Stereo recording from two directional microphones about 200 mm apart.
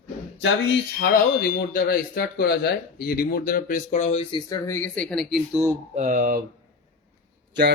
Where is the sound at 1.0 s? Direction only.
45° left (ahead or behind); by 5.6 s centre (ahead or behind).